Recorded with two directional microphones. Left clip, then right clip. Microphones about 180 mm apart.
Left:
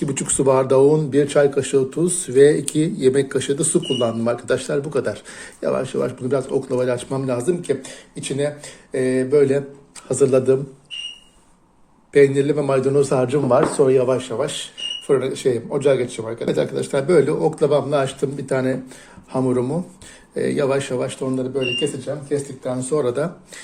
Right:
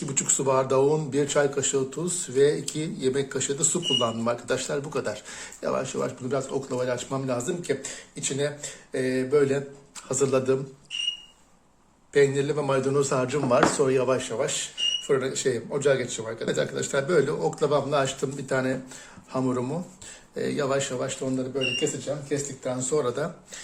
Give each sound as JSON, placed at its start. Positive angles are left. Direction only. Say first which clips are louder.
{"t": 0.0, "sound": "speech", "louder": "left 7 dB", "side_deg": 30}
{"t": 12.1, "sound": "speech", "louder": "left 7 dB", "side_deg": 25}
{"t": 22.3, "sound": "speech", "louder": "left 8 dB", "side_deg": 15}